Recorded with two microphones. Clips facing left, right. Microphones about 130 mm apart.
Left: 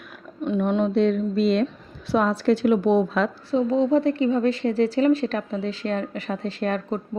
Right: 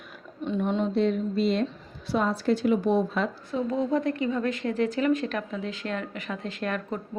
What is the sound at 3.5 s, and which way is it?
A woman's voice, 25° left (ahead or behind).